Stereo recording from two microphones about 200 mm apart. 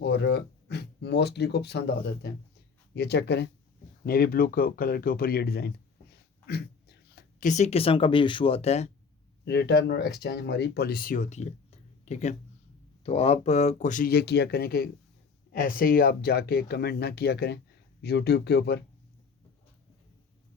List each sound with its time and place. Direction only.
0.0 s speech: 55° left (ahead or behind); by 8.9 s 30° left (ahead or behind)
9.4 s speech: 55° left (ahead or behind)